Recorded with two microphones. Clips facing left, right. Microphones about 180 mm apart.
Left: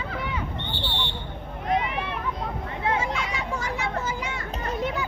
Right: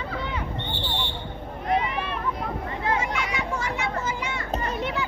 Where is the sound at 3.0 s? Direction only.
30° left (ahead or behind).